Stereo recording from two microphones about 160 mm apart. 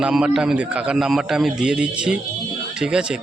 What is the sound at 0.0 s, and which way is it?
Speech, 5° right (ahead or behind).